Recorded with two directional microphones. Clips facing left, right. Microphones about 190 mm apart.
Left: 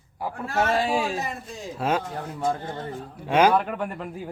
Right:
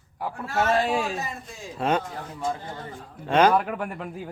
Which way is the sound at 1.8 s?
5° left (ahead or behind).